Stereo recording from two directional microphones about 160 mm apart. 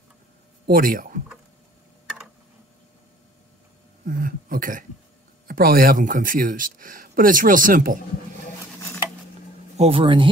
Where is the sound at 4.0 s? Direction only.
60° right (ahead or behind).